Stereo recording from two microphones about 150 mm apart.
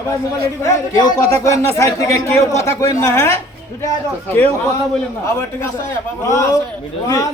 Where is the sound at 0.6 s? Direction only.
25° left (ahead or behind).